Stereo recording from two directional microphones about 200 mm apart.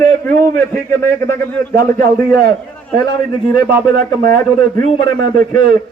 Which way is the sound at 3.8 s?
50° right (ahead or behind).